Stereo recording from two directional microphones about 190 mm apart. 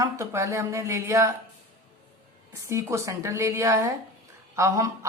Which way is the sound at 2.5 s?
15° right (ahead or behind).